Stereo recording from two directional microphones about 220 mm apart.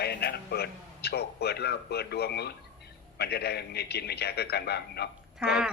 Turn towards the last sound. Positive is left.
turn(degrees=-5)  # may be behind; listen again after turning